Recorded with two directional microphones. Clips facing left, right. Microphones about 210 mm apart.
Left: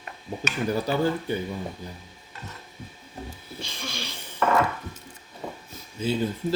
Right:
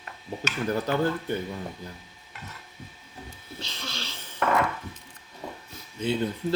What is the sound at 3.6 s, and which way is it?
Wheeze, 10° left (ahead or behind).